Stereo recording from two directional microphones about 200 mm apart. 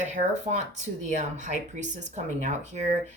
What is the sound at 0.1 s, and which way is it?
Speech, 35° right (ahead or behind).